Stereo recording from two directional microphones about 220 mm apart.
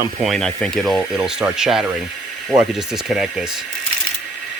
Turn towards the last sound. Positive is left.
turn(degrees=0)  # may be behind; listen again after turning